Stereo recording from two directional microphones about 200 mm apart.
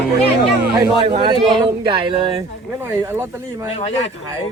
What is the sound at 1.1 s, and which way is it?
Speech, 25° right (ahead or behind).